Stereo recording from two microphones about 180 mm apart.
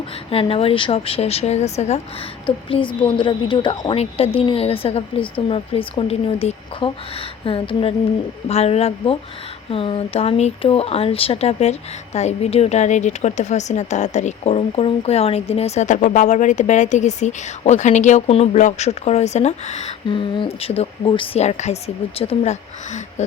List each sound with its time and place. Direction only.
0.3 s speech: 30° left (ahead or behind)
20.1 s speech: 25° left (ahead or behind)